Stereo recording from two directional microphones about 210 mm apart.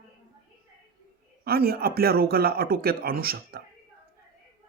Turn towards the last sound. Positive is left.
turn(degrees=-45)  # may be behind; listen again after turning